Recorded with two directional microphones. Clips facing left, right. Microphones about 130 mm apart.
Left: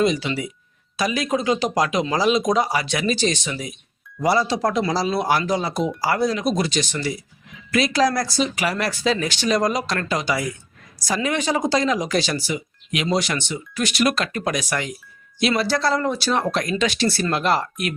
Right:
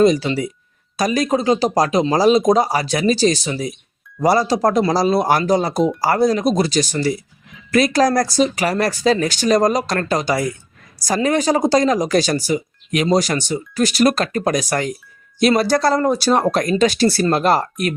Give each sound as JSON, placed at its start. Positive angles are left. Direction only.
{"t": 0.0, "sound": "speech", "side_deg": -40}